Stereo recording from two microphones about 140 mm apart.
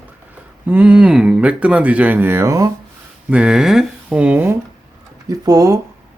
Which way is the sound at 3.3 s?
5° right (ahead or behind).